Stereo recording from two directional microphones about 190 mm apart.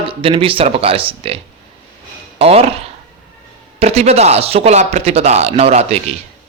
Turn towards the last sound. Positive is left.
turn(degrees=-35)  # may be behind; listen again after turning